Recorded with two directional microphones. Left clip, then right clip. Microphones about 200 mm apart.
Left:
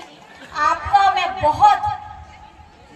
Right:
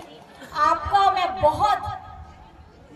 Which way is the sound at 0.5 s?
60° right (ahead or behind).